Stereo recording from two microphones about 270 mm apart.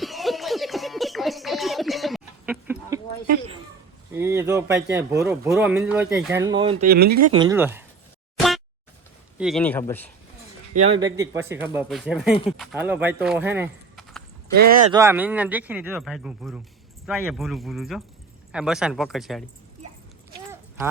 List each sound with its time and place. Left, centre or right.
0.0 s a sound: centre
4.2 s speech: centre
6.4 s speech: centre
6.8 s speech: right
7.3 s speech: centre
8.4 s a sound: centre
9.4 s speech: centre
10.8 s speech: centre
14.5 s speech: right
14.9 s speech: centre
20.5 s horse: centre